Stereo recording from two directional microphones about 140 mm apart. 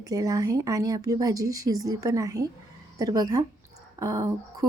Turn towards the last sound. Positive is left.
turn(degrees=-25)  # may be behind; listen again after turning